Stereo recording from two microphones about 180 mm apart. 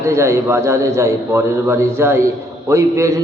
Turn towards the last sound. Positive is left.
turn(degrees=-15)  # may be behind; listen again after turning